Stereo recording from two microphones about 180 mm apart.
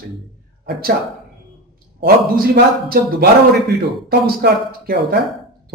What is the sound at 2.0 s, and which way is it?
Speech, 55° right (ahead or behind).